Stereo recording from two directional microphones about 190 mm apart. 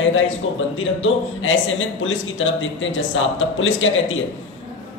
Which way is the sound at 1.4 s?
90° left.